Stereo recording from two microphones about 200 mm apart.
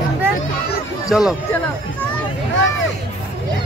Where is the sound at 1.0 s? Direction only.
5° right (ahead or behind).